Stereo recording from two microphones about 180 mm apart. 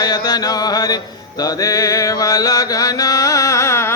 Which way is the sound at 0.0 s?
20° left (ahead or behind).